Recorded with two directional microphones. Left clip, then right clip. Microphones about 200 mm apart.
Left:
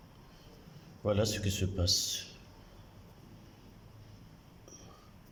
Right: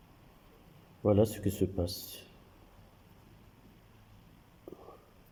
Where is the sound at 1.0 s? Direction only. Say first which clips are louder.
Right 4 dB; 25° right (ahead or behind).